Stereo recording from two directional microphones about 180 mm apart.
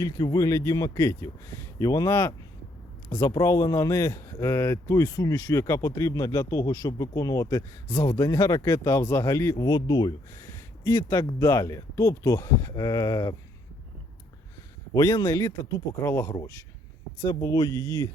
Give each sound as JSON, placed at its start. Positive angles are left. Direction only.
{"t": 0.0, "sound": "speech", "side_deg": 20}
{"t": 14.9, "sound": "speech", "side_deg": 20}